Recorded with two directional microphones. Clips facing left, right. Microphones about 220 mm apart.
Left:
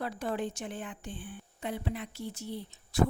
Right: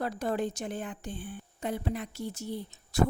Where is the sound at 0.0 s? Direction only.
40° right (ahead or behind).